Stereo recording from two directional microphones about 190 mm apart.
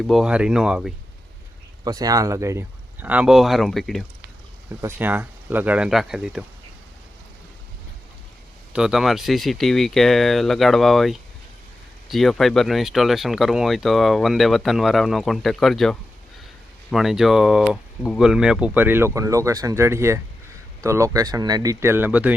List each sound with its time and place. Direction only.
0.0 s speech: centre (ahead or behind)
1.8 s speech: 20° right (ahead or behind); by 4.0 s centre (ahead or behind)
4.8 s speech: 10° right (ahead or behind)
8.7 s speech: 5° right (ahead or behind)